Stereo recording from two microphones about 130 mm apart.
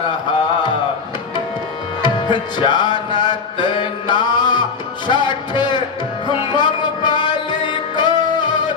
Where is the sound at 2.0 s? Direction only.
35° left (ahead or behind).